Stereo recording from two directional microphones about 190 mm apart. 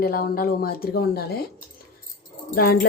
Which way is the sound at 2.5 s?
50° left (ahead or behind).